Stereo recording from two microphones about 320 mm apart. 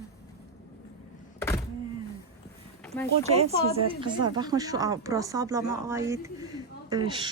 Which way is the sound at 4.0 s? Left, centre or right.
Centre.